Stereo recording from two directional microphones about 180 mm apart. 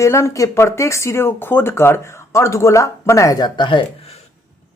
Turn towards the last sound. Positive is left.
turn(degrees=25)  # may be behind; listen again after turning